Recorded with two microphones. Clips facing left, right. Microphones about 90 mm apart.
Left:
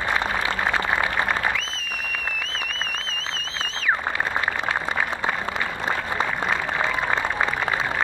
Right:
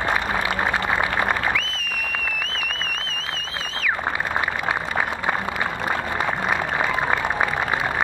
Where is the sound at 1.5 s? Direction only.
25° left (ahead or behind).